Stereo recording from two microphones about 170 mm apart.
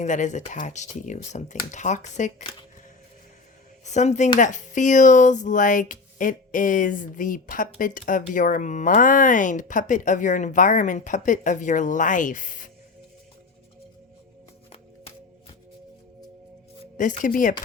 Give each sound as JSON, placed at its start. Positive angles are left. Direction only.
{"t": 0.0, "sound": "speech", "side_deg": 45}
{"t": 3.8, "sound": "speech", "side_deg": 45}
{"t": 17.0, "sound": "speech", "side_deg": 50}